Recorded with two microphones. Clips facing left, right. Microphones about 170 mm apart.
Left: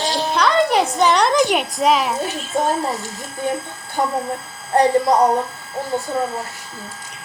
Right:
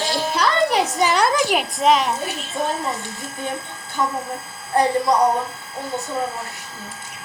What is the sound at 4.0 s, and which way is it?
Speech, 40° left (ahead or behind).